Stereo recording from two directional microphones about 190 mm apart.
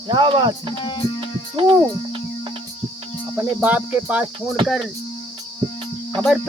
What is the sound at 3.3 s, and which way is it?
Speech, 10° right (ahead or behind).